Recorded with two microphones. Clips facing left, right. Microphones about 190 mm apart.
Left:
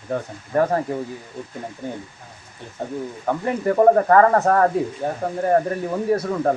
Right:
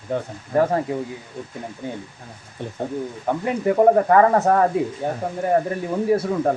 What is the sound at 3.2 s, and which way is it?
Speech, 10° right (ahead or behind).